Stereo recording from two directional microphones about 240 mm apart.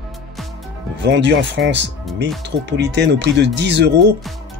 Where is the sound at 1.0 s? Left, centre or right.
Right.